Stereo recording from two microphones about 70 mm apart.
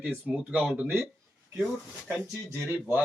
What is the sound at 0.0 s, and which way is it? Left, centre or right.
Speech, right.